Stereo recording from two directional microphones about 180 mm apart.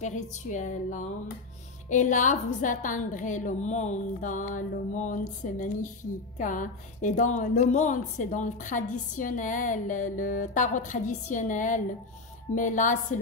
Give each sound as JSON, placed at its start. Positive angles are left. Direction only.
{"t": 0.0, "sound": "a woman's voice", "side_deg": 45}